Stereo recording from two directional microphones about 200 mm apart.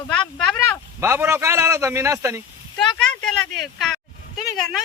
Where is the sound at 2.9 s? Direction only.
5° left (ahead or behind).